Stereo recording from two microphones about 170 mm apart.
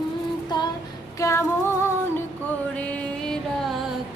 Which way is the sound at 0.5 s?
25° left (ahead or behind).